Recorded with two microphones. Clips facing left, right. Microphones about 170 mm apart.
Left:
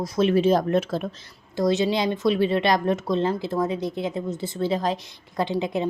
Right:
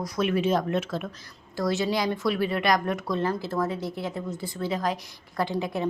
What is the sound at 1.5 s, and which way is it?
A woman's voice, 20° left (ahead or behind).